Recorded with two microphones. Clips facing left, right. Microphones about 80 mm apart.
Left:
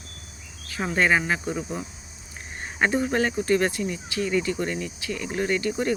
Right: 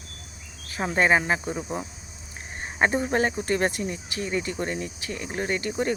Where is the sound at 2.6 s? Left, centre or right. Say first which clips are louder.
Even; right.